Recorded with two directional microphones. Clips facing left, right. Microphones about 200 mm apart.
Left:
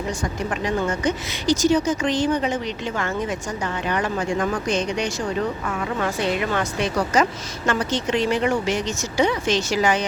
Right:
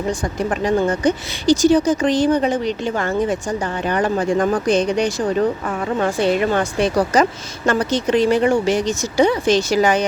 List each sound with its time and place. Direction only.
0.1 s speech: 35° right (ahead or behind)